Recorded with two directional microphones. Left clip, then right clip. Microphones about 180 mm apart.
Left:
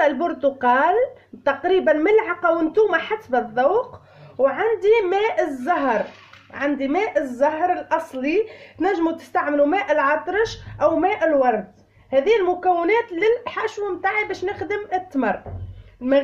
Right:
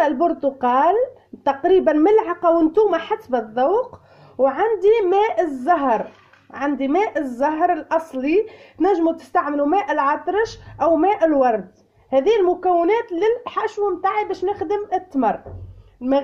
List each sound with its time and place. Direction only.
0.0 s a woman's voice: 25° right (ahead or behind)